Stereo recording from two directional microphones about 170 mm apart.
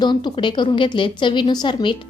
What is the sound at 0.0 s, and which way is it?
A woman's voice, 25° left (ahead or behind).